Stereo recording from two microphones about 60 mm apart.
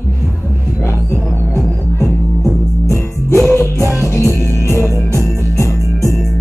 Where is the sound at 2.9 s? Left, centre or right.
Left.